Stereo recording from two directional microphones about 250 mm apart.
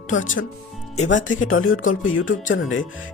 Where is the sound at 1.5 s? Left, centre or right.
Left.